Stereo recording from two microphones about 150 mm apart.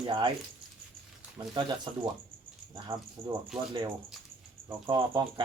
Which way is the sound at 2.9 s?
35° right (ahead or behind).